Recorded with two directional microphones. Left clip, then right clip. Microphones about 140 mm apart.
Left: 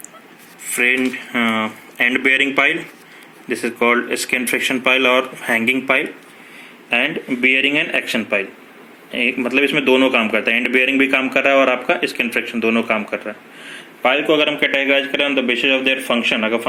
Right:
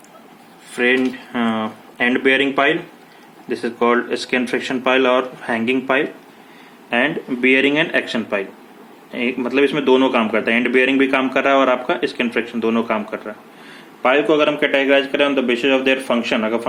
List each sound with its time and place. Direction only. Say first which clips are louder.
0.8 s a man's voice: left 1 dB; centre (ahead or behind)